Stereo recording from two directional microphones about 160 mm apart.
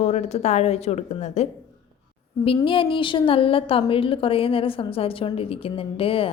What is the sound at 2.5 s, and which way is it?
A woman's voice, 30° left (ahead or behind).